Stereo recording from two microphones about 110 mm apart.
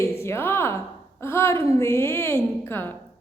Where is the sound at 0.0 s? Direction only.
25° left (ahead or behind).